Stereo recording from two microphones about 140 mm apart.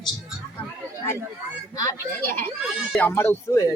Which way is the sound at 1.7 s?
25° left (ahead or behind).